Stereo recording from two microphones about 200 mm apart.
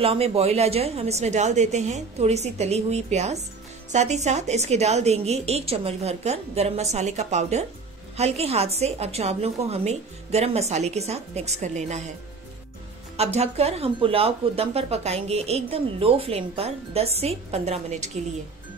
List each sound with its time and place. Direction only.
0.0 s speech: 30° right (ahead or behind)
13.2 s speech: 30° right (ahead or behind)